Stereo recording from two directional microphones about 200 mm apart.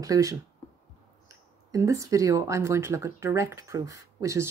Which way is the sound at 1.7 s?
15° right (ahead or behind).